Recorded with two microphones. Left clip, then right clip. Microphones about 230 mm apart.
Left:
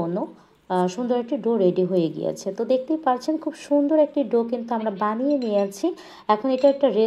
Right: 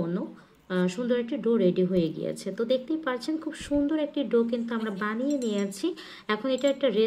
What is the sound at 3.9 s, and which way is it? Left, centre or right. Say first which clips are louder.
Speech: left 7 dB; left.